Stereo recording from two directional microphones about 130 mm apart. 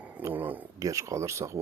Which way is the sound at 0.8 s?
25° right (ahead or behind).